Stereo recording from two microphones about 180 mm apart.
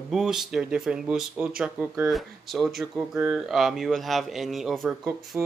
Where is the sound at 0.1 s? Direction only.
Centre (ahead or behind).